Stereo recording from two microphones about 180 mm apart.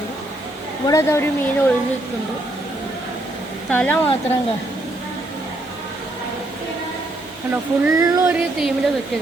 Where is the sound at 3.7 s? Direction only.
10° left (ahead or behind).